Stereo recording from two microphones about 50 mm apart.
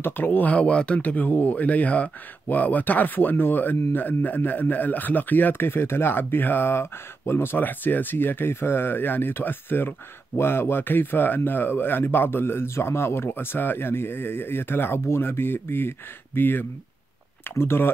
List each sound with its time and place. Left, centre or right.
0.0 s speech: left
0.5 s speech: left